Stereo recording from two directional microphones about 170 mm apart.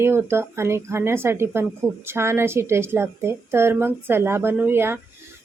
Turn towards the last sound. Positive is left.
turn(degrees=-15)  # may be behind; listen again after turning